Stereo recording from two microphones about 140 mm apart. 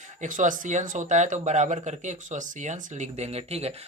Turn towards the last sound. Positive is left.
turn(degrees=-45)  # may be behind; listen again after turning